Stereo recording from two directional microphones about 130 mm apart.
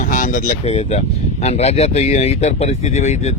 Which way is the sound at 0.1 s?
90° left.